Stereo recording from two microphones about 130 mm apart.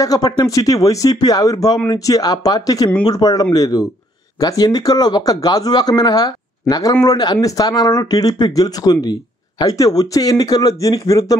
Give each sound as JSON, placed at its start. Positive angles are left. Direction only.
{"t": 0.0, "sound": "speech", "side_deg": 30}